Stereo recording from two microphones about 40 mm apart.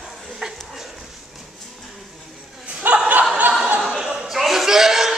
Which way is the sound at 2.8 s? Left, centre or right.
Right.